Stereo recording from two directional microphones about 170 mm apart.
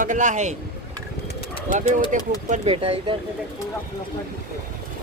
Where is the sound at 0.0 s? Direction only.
50° right (ahead or behind).